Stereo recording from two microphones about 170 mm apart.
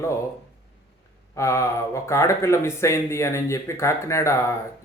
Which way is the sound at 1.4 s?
15° left (ahead or behind).